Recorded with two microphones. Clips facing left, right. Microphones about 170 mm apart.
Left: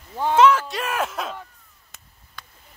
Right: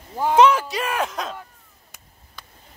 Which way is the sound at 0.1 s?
10° right (ahead or behind).